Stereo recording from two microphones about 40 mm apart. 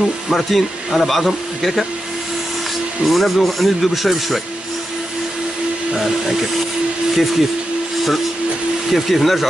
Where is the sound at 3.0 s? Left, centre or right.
Centre.